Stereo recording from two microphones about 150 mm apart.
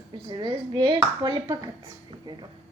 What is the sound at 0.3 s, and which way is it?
Speech, 30° right (ahead or behind).